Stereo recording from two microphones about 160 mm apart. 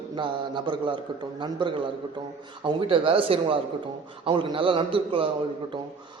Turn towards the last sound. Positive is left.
turn(degrees=-35)  # may be behind; listen again after turning